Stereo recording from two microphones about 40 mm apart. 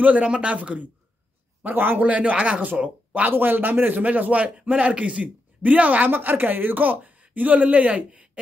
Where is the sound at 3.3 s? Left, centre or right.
Right.